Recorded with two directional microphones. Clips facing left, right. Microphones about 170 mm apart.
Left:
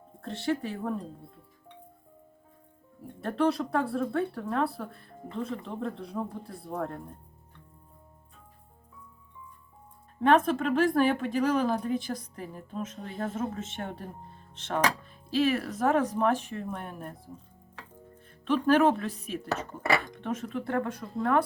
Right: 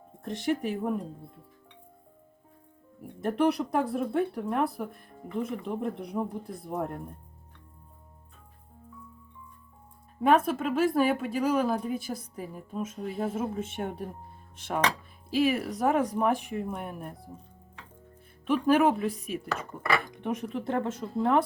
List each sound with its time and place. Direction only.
0.2 s speech: 15° right (ahead or behind)
3.0 s speech: 15° right (ahead or behind)
10.2 s speech: 10° right (ahead or behind)
18.4 s speech: 10° right (ahead or behind)